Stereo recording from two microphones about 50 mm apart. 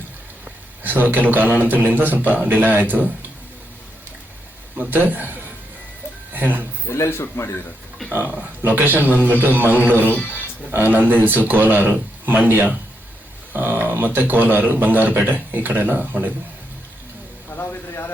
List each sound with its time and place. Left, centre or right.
0.8 s a man's voice: right
4.8 s a man's voice: right
6.8 s speech: left
8.1 s a man's voice: right
10.1 s speech: left
10.7 s a man's voice: right
17.5 s a sound: left